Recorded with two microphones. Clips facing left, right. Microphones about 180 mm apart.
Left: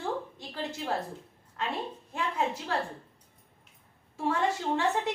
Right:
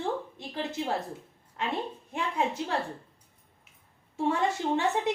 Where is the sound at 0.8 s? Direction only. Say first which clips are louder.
Right 3 dB; 25° right (ahead or behind).